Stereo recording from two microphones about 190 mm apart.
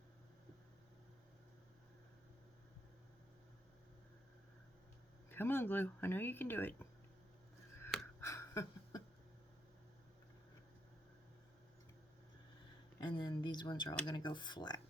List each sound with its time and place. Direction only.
5.3 s speech: 10° left (ahead or behind)
8.2 s a sound: 15° left (ahead or behind)
13.0 s speech: 20° left (ahead or behind)